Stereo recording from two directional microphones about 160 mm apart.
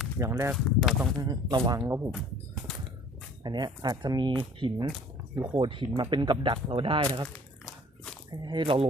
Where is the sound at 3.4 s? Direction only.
25° right (ahead or behind).